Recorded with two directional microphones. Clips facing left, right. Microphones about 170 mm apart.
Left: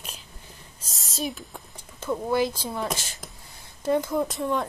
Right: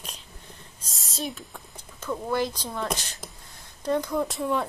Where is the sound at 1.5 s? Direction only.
15° left (ahead or behind); by 4.6 s centre (ahead or behind).